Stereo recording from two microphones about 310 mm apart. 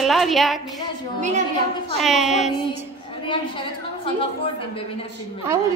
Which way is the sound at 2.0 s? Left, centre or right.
Centre.